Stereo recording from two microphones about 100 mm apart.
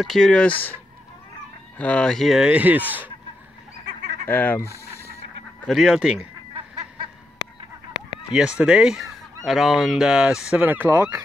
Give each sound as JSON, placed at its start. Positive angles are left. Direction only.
{"t": 0.0, "sound": "speech", "side_deg": 5}
{"t": 1.8, "sound": "speech", "side_deg": 10}
{"t": 4.3, "sound": "fowl", "side_deg": 20}
{"t": 5.7, "sound": "speech", "side_deg": -5}
{"t": 8.3, "sound": "speech", "side_deg": -10}
{"t": 10.6, "sound": "speech", "side_deg": -20}